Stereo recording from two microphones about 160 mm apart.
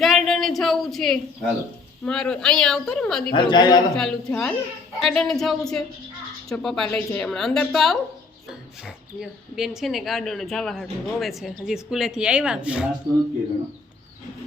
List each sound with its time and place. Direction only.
0.0 s speech: centre (ahead or behind)
3.3 s speech: 30° left (ahead or behind)
3.9 s speech: 5° left (ahead or behind)
9.2 s speech: centre (ahead or behind)